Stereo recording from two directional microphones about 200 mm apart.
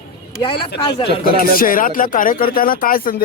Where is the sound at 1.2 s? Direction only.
45° left (ahead or behind).